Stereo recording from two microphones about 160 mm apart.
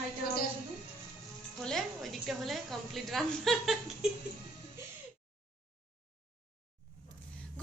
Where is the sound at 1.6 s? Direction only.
Centre (ahead or behind).